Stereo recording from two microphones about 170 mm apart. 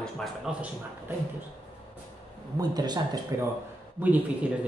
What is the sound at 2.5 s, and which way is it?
Speech, 25° right (ahead or behind).